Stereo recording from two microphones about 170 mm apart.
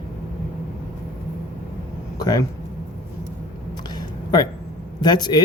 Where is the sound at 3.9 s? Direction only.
25° left (ahead or behind).